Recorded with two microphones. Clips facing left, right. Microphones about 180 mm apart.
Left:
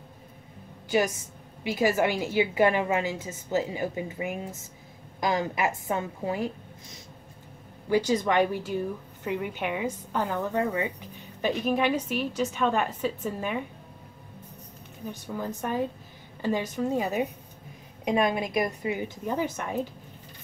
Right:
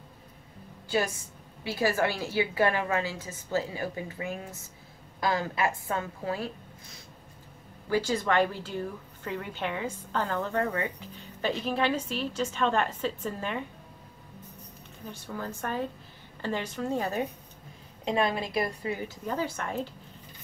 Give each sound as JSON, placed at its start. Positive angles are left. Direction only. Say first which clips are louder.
{"t": 1.6, "sound": "a woman's voice", "louder": "left 3 dB", "side_deg": 15}
{"t": 8.1, "sound": "a woman's voice", "louder": "left 1 dB", "side_deg": 15}
{"t": 15.0, "sound": "a woman's voice", "louder": "left 4 dB", "side_deg": 15}